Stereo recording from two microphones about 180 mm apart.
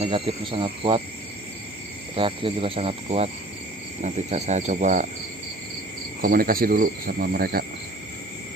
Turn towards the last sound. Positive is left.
turn(degrees=-55)  # may be behind; listen again after turning